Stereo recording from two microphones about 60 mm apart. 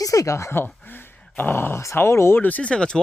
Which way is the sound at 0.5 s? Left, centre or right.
Left.